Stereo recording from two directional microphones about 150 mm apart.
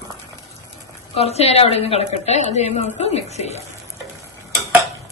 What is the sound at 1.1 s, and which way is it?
A woman's voice, 45° left (ahead or behind).